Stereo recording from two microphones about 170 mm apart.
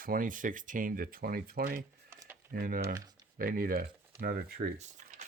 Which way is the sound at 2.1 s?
15° right (ahead or behind).